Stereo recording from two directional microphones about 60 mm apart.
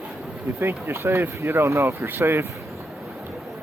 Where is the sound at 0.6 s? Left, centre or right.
Right.